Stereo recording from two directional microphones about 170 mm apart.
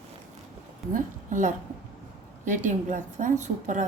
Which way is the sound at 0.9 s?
50° right (ahead or behind).